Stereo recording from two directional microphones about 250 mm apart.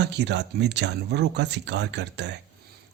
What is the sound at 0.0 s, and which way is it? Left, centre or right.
Speech, right.